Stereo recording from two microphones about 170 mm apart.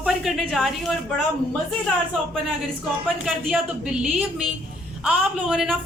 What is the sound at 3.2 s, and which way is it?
A man's voice, 5° right (ahead or behind).